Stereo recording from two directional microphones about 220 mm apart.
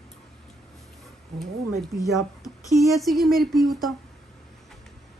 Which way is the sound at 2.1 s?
15° left (ahead or behind).